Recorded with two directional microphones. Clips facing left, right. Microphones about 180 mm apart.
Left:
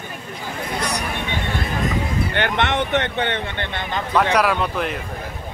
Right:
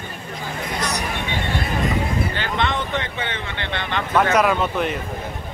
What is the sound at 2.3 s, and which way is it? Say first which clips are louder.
Speech: left 3 dB; 65° left (ahead or behind).